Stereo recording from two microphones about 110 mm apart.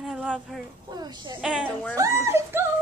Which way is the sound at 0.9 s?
40° right (ahead or behind).